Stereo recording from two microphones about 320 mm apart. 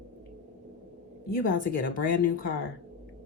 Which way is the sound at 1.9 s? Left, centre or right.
Left.